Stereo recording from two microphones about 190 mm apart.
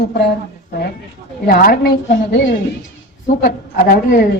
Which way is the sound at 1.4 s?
50° left (ahead or behind).